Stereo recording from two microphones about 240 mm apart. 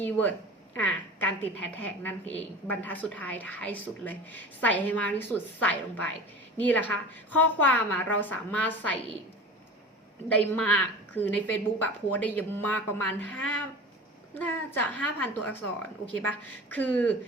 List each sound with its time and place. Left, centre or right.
0.0 s a woman's voice: centre
10.3 s a woman's voice: centre